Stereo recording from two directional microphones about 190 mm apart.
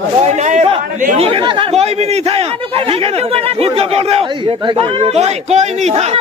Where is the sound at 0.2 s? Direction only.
40° right (ahead or behind).